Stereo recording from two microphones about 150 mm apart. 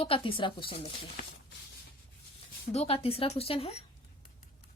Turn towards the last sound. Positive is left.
turn(degrees=40)  # may be behind; listen again after turning